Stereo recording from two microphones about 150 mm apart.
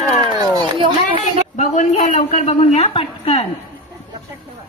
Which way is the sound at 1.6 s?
55° left (ahead or behind).